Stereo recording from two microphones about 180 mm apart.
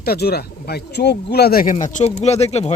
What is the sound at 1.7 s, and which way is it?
Speech, 40° left (ahead or behind).